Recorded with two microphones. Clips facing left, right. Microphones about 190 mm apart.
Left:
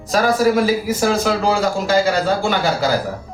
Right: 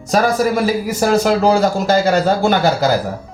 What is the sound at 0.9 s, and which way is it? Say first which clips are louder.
A man's voice: right 3 dB; 40° right (ahead or behind).